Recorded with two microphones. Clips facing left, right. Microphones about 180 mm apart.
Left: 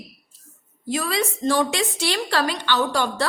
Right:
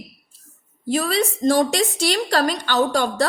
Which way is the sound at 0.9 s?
35° right (ahead or behind).